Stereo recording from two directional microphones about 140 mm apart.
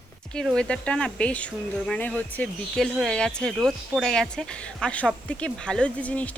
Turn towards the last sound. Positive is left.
turn(degrees=10)  # may be behind; listen again after turning